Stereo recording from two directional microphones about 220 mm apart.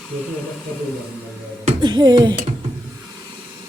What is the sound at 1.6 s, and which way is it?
Speech, 20° right (ahead or behind).